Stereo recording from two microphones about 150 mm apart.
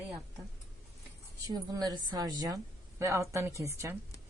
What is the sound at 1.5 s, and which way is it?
A woman's voice, 25° right (ahead or behind).